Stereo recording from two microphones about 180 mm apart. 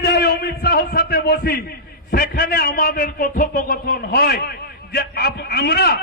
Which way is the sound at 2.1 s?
55° left (ahead or behind).